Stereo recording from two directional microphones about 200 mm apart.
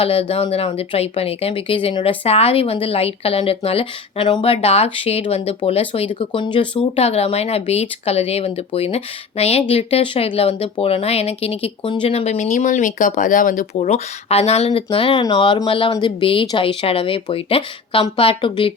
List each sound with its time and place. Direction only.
0.0 s speech: 30° left (ahead or behind)